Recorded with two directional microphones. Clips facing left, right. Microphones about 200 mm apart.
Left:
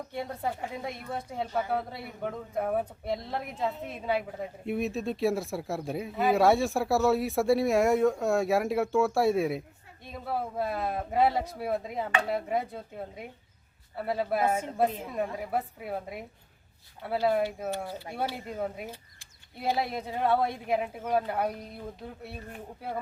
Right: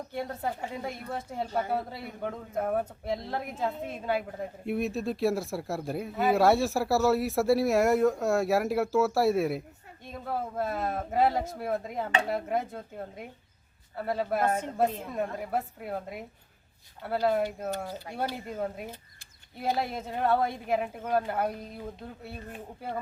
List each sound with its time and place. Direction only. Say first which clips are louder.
0.1 s a woman's voice: even; centre (ahead or behind)